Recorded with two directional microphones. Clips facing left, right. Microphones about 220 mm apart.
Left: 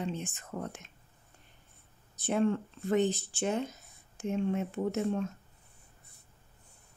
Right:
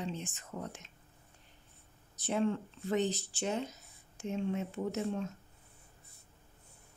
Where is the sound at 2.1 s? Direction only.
55° left (ahead or behind).